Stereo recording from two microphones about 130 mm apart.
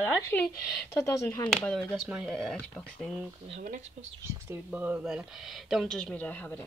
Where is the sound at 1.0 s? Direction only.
20° left (ahead or behind).